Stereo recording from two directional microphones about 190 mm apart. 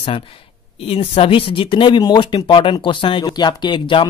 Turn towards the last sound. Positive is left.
turn(degrees=25)  # may be behind; listen again after turning